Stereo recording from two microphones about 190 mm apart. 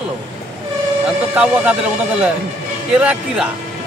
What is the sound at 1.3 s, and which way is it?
A man's voice, 5° right (ahead or behind).